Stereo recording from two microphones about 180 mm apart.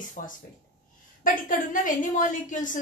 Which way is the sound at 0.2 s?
45° left (ahead or behind).